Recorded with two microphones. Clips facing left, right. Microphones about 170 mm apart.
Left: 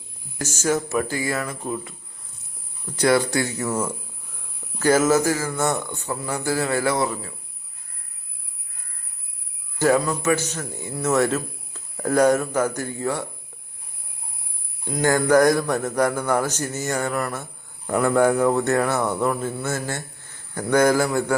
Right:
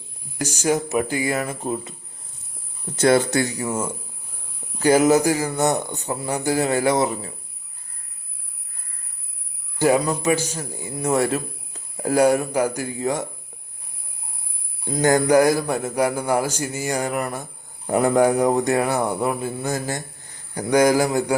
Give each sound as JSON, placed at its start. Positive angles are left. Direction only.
{"t": 0.3, "sound": "a man's voice", "side_deg": -15}
{"t": 4.8, "sound": "speech", "side_deg": -15}
{"t": 9.7, "sound": "a man's voice", "side_deg": -15}
{"t": 14.8, "sound": "a man's voice", "side_deg": -25}